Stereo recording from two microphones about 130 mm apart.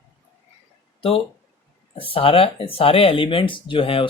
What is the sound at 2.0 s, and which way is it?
Speech, 45° left (ahead or behind).